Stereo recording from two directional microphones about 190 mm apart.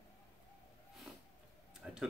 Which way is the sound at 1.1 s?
Centre (ahead or behind).